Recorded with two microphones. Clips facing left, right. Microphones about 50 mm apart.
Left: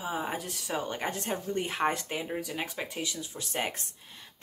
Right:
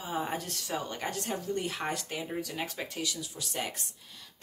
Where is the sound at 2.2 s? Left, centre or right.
Centre.